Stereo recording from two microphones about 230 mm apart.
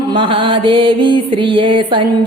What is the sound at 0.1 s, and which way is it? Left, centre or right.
A woman's voice, right.